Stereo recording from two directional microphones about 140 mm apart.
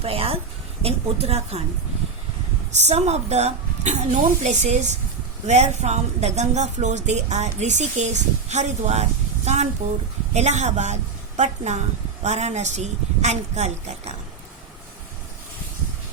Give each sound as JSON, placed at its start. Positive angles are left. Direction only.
{"t": 0.0, "sound": "a woman's voice", "side_deg": -45}
{"t": 2.7, "sound": "a woman's voice", "side_deg": -50}